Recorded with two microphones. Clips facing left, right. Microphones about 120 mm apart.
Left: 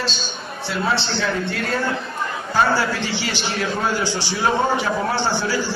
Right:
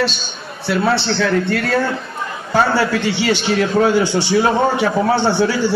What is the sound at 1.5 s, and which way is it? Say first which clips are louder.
A man's voice: right 5 dB; 65° right (ahead or behind).